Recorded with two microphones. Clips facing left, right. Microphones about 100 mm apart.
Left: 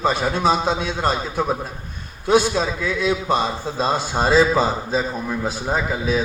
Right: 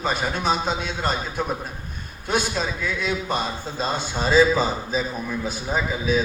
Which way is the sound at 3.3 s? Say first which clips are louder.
Left 5 dB; 80° left.